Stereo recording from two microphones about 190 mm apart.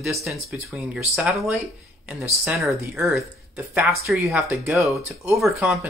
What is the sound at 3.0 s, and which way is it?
Speech, 15° right (ahead or behind).